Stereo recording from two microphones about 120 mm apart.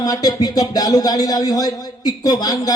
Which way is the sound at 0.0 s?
30° left (ahead or behind).